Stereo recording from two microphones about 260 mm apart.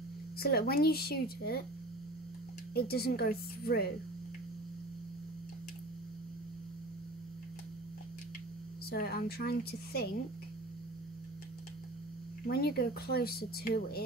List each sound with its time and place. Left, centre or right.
0.4 s speech: left
2.7 s speech: left
8.9 s speech: left
12.4 s speech: left